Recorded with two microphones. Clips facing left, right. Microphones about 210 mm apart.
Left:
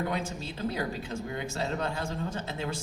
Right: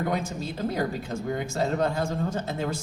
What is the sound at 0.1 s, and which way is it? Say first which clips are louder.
A man's voice: right 4 dB; 45° right (ahead or behind).